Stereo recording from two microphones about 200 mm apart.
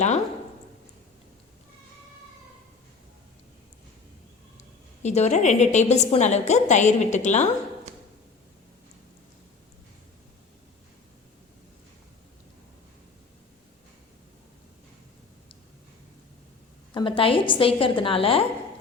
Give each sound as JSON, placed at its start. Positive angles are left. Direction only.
{"t": 5.0, "sound": "a woman's voice", "side_deg": 35}
{"t": 16.9, "sound": "a woman's voice", "side_deg": 25}